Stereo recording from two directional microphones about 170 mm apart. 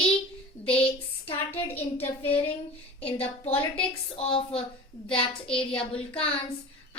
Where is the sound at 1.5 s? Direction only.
10° left (ahead or behind).